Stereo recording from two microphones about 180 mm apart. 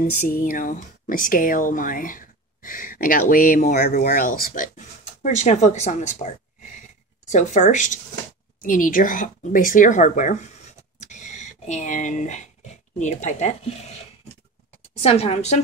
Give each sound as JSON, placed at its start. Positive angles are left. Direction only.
{"t": 0.0, "sound": "speech", "side_deg": 45}
{"t": 11.0, "sound": "a sound", "side_deg": 40}
{"t": 13.0, "sound": "speech", "side_deg": 40}
{"t": 15.0, "sound": "speech", "side_deg": 35}